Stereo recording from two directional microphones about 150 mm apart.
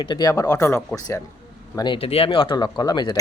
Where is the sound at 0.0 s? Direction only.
30° left (ahead or behind).